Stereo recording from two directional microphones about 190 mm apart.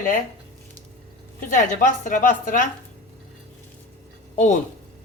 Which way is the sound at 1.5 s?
45° left (ahead or behind).